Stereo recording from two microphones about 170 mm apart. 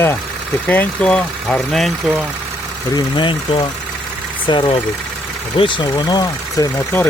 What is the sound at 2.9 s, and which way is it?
Speech, 30° left (ahead or behind).